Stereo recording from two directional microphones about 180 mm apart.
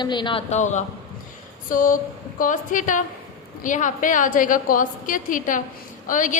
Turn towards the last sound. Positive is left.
turn(degrees=45)  # may be behind; listen again after turning